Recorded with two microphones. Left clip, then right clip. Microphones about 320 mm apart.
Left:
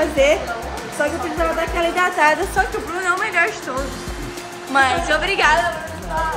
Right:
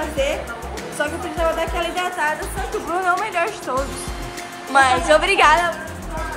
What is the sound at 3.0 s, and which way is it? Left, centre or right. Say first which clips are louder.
Speech: left 3 dB; centre.